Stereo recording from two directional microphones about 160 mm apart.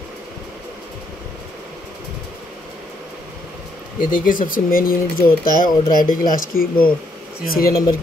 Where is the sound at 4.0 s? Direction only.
55° left (ahead or behind).